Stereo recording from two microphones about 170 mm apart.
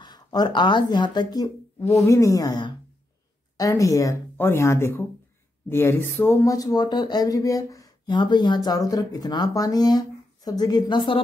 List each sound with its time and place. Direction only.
0.0 s speech: 25° left (ahead or behind)